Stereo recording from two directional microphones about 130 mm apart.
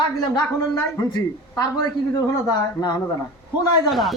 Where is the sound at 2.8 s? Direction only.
30° left (ahead or behind).